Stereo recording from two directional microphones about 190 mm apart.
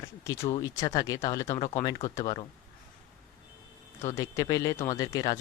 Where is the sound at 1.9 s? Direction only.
20° left (ahead or behind).